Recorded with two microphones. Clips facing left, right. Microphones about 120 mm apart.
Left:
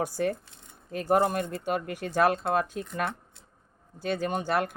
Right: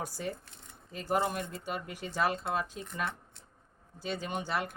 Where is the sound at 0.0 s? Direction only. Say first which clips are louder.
Left 9 dB; 60° left (ahead or behind).